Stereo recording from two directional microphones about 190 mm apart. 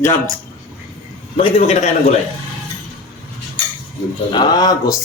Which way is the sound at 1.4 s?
35° left (ahead or behind).